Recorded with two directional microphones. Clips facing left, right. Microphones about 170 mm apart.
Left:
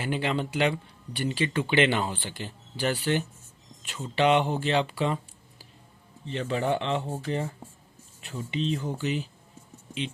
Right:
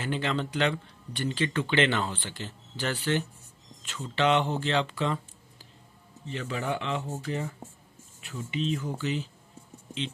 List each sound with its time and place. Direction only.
0.0 s speech: 10° left (ahead or behind)
6.2 s speech: 30° left (ahead or behind)